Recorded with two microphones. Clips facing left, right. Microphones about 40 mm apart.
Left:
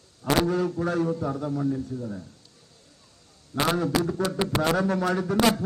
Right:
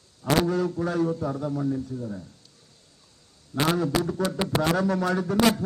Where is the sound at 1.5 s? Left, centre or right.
Centre.